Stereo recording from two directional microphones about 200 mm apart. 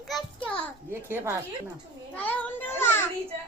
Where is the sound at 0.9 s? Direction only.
10° right (ahead or behind).